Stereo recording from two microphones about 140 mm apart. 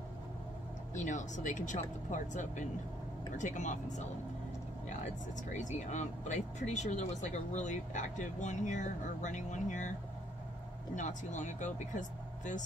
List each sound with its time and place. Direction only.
0.9 s speech: 60° left (ahead or behind)
5.5 s speech: 60° left (ahead or behind)
11.0 s speech: 60° left (ahead or behind)